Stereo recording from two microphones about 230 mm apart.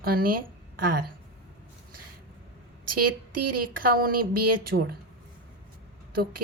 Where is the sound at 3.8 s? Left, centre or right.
Right.